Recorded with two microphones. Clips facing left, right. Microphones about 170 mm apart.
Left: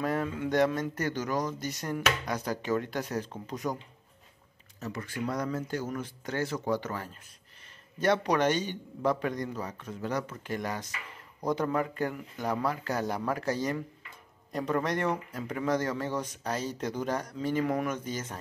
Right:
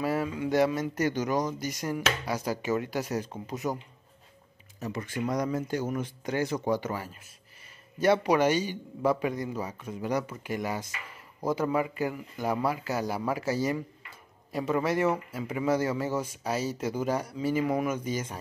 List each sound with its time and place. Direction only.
0.0 s a man's voice: 5° right (ahead or behind)